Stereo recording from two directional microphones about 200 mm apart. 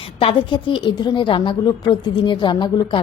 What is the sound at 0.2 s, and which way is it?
A woman's voice, 25° left (ahead or behind).